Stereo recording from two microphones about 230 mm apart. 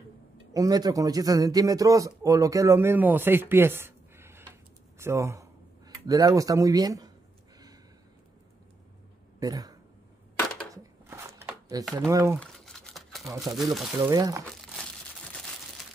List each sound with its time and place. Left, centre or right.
0.5 s speech: centre
9.4 s speech: centre
10.7 s a sound: centre
12.1 s speech: centre
12.4 s a sound: centre
13.4 s speech: centre
13.9 s speech: centre
14.6 s crumpling: centre